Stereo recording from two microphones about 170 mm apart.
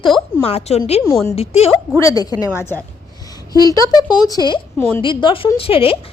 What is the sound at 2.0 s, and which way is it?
Speech, 20° left (ahead or behind).